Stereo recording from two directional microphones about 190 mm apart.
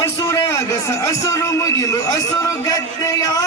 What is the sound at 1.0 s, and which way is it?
A man's voice, 15° left (ahead or behind).